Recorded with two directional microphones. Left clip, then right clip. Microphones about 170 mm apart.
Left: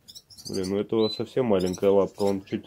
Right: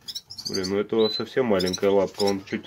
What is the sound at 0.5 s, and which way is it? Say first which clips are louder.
Speech: right 2 dB; 20° left (ahead or behind).